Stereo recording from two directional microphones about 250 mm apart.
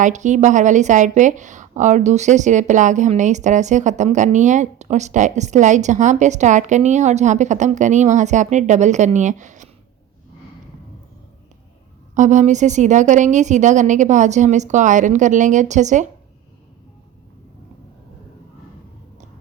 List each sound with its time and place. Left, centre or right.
0.0 s a woman's voice: right
12.1 s a woman's voice: right